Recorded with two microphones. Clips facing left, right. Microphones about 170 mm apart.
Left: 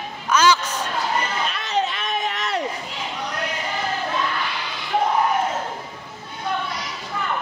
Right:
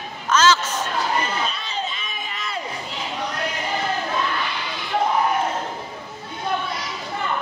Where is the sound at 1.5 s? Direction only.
70° left (ahead or behind).